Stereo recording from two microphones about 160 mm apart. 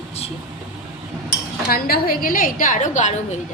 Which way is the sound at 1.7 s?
65° left (ahead or behind).